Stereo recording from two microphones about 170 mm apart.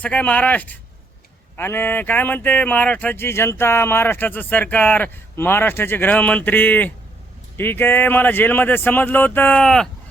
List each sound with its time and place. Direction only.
0.0 s speech: 10° left (ahead or behind)